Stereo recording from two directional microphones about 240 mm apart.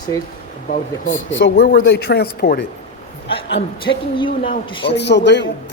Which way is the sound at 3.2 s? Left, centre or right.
Left.